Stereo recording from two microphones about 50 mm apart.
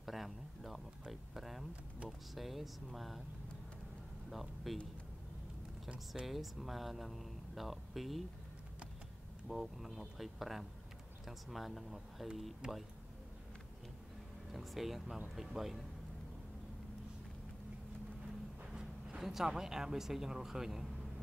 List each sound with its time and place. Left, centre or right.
0.0 s a sound: centre
2.0 s speech: centre
4.3 s speech: centre
6.2 s speech: centre
9.5 s speech: centre
12.6 s speech: centre
14.5 s speech: centre
18.7 s speech: centre